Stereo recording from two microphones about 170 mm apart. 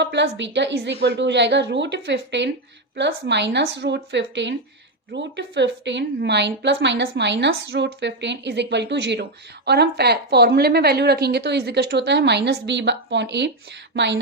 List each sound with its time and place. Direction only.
0.0 s a woman's voice: 90° right
9.6 s a woman's voice: 75° right (ahead or behind); by 14.2 s 90° right